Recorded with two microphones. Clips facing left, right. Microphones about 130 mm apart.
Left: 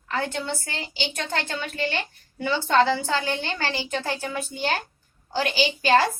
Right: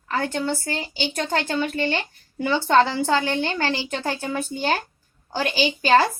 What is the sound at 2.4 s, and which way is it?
A woman's voice, 55° right (ahead or behind).